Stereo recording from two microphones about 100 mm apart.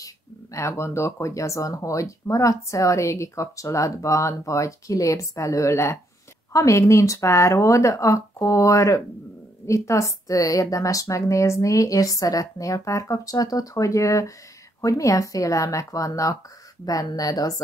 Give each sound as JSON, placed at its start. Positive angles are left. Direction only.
{"t": 0.0, "sound": "speech", "side_deg": 30}